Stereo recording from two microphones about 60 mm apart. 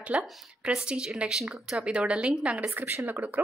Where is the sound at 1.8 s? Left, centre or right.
Centre.